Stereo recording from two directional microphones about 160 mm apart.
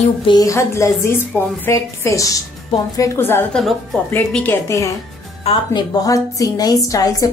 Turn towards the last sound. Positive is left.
turn(degrees=20)  # may be behind; listen again after turning